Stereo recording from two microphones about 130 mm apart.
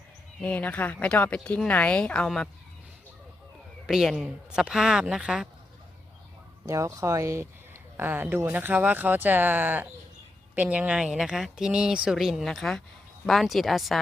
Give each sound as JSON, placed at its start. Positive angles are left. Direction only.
{"t": 0.4, "sound": "speech", "side_deg": 10}
{"t": 3.8, "sound": "speech", "side_deg": -5}
{"t": 6.7, "sound": "speech", "side_deg": -25}